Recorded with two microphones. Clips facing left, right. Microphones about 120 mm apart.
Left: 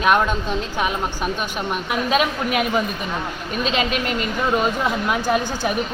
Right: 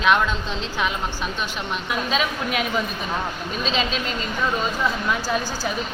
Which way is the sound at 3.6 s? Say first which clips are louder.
Left 3 dB; 65° left (ahead or behind).